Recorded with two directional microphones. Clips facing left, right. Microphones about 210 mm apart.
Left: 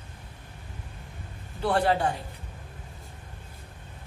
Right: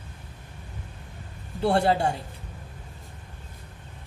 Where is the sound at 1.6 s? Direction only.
30° right (ahead or behind).